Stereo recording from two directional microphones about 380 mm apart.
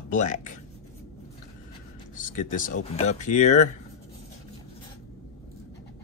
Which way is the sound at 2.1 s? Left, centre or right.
Left.